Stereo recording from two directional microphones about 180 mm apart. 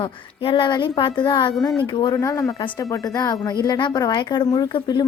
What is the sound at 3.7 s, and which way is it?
A woman's voice, 25° left (ahead or behind).